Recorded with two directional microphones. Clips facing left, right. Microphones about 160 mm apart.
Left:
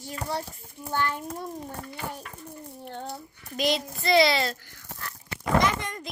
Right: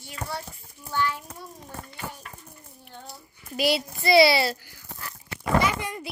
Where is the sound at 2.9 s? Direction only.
60° left (ahead or behind).